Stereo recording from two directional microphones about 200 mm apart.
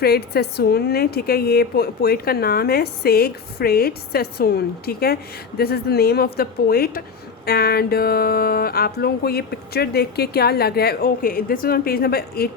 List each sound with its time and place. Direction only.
0.0 s a woman's voice: 50° left (ahead or behind)